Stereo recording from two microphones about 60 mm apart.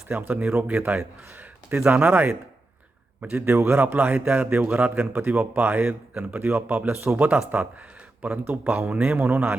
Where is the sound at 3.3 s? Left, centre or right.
Right.